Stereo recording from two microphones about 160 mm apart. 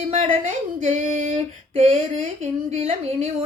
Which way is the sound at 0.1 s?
50° right (ahead or behind).